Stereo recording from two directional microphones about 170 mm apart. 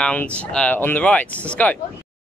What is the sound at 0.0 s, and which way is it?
Speech, 5° left (ahead or behind).